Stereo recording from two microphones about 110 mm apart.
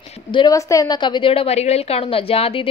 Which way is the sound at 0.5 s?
30° left (ahead or behind).